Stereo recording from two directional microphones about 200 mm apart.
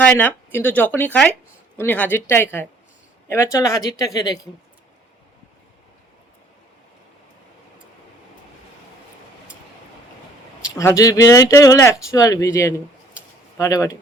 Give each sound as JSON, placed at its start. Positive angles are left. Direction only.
{"t": 0.0, "sound": "speech", "side_deg": 10}
{"t": 10.8, "sound": "speech", "side_deg": 15}